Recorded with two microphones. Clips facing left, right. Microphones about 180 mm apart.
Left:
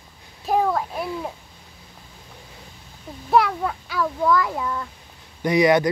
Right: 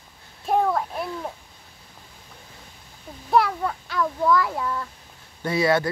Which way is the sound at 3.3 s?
Centre (ahead or behind).